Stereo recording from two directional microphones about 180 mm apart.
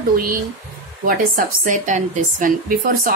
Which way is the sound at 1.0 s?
50° right (ahead or behind).